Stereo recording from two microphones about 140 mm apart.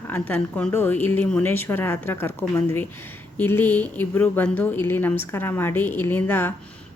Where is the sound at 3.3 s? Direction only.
15° left (ahead or behind).